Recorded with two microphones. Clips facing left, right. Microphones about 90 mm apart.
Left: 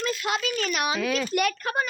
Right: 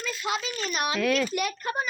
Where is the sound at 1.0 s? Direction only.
5° left (ahead or behind).